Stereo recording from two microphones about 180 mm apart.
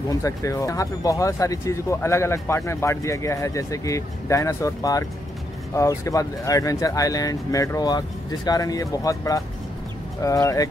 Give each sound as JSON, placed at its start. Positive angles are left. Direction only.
{"t": 0.1, "sound": "speech", "side_deg": 20}